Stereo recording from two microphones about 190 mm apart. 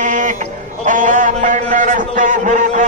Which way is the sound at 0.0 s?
40° right (ahead or behind).